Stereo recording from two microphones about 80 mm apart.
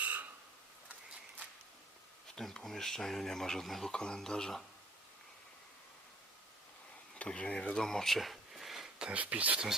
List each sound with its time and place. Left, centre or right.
0.0 s a sound: centre
2.3 s speech: centre
7.2 s speech: centre